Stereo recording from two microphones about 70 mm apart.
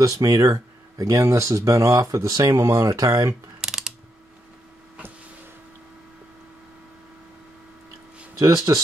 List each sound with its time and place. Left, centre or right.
0.0 s speech: right
3.6 s mechanisms: centre
8.4 s speech: right